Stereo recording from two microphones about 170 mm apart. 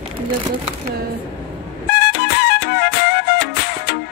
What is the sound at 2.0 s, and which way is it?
Music, 75° left (ahead or behind).